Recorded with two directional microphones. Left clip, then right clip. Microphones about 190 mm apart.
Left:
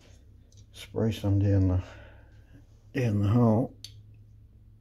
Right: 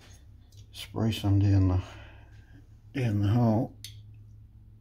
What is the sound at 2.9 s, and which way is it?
Speech, 30° left (ahead or behind).